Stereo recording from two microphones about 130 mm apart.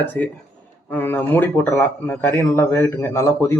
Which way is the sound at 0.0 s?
15° left (ahead or behind).